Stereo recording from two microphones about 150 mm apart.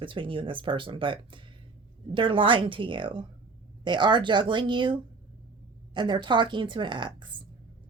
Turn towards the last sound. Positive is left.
turn(degrees=-30)  # may be behind; listen again after turning